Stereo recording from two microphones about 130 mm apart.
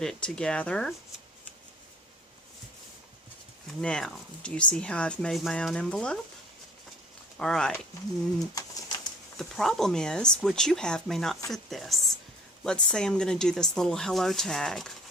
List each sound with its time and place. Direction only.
0.0 s speech: 5° left (ahead or behind)
3.8 s speech: 5° left (ahead or behind)
7.3 s speech: 5° left (ahead or behind)
8.5 s pigeon: 30° left (ahead or behind)
9.4 s speech: 5° left (ahead or behind)